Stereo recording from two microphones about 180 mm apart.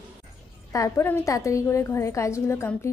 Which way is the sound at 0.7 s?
15° left (ahead or behind).